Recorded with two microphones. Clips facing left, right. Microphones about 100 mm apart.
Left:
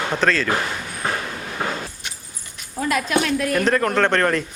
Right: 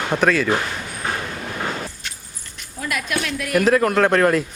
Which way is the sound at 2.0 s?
15° left (ahead or behind).